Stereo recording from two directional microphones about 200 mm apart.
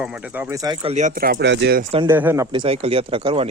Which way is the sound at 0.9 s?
40° right (ahead or behind).